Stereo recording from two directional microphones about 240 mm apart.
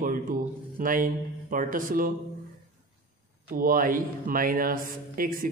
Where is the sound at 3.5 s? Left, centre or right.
Right.